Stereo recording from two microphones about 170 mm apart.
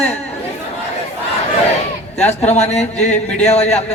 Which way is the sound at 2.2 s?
40° left (ahead or behind).